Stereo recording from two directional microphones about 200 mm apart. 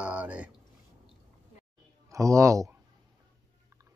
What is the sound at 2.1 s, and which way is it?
Speech, 15° right (ahead or behind).